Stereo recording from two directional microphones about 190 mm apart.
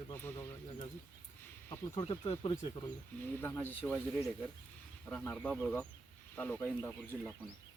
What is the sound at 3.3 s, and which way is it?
Speech, 10° left (ahead or behind).